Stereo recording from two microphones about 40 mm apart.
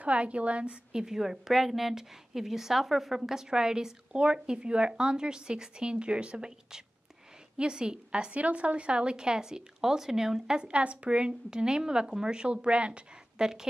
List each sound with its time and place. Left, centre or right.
0.0 s a woman's voice: right
0.9 s a woman's voice: centre
3.2 s speech: centre
10.7 s speech: right
13.4 s a woman's voice: centre